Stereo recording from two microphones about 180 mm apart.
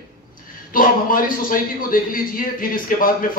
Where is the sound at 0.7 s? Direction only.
50° left (ahead or behind).